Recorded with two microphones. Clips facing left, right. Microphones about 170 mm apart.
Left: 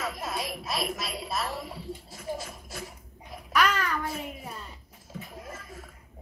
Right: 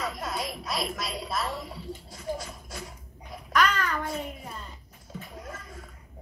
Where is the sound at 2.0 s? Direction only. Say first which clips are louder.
Right 3 dB; centre (ahead or behind).